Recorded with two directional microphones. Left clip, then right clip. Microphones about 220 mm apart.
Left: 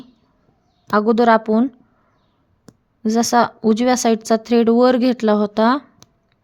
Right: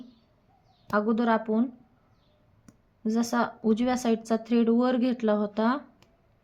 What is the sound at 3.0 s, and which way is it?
A woman's voice, 45° left (ahead or behind).